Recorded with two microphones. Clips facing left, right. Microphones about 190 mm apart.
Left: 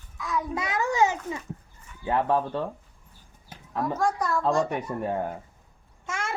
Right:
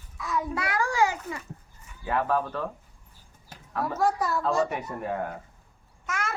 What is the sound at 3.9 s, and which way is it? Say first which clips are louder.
Speech: right 1 dB; 5° right (ahead or behind).